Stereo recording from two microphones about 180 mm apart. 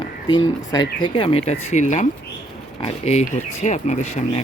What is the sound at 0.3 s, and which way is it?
Speech, 25° left (ahead or behind).